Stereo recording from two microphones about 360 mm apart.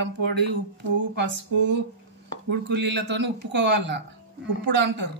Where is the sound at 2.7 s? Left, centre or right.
Right.